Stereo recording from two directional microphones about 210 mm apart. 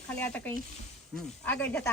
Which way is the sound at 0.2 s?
10° left (ahead or behind).